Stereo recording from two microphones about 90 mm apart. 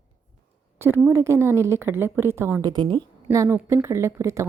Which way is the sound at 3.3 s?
30° right (ahead or behind).